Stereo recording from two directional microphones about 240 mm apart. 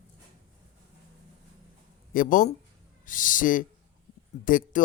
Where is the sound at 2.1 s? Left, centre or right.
Left.